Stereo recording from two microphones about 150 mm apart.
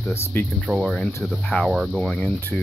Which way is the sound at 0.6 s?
Centre (ahead or behind).